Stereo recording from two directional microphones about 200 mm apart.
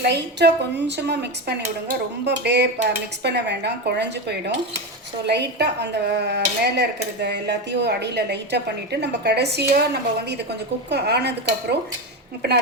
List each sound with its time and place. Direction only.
0.0 s a woman's voice: 60° right (ahead or behind)